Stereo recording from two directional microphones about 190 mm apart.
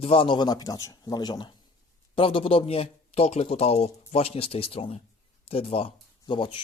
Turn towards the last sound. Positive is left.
turn(degrees=25)  # may be behind; listen again after turning